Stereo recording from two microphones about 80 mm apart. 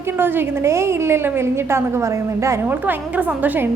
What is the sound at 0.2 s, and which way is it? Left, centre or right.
A woman's voice, right.